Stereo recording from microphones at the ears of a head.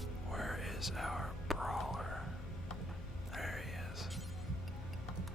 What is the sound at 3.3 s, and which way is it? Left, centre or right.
Whispering, centre.